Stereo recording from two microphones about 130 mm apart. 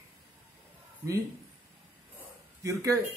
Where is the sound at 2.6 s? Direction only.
25° right (ahead or behind).